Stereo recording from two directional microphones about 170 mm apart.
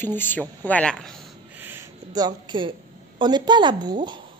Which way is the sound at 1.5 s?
15° right (ahead or behind).